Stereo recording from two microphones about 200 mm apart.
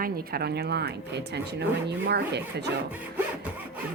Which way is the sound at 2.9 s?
10° right (ahead or behind).